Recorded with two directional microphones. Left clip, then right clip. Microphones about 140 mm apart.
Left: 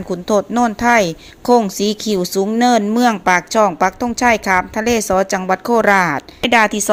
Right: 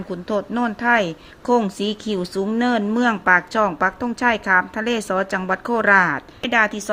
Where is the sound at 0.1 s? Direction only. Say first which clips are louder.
Left 8 dB; 35° left (ahead or behind).